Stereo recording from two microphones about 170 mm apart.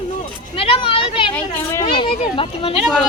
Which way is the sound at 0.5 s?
35° left (ahead or behind).